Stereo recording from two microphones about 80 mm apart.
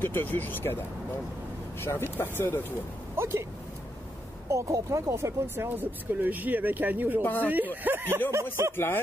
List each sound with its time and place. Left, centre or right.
0.0 s speech: left
1.8 s speech: left
3.2 s speech: right
4.5 s speech: right
7.2 s speech: left
7.4 s speech: right
8.7 s speech: left